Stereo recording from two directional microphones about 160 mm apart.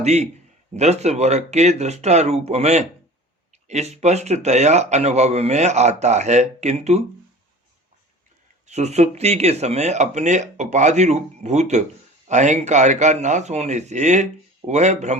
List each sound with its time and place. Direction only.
0.0 s a man's voice: 45° right (ahead or behind)
8.6 s speech: 45° right (ahead or behind)